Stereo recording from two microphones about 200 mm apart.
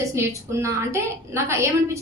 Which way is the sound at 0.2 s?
15° right (ahead or behind).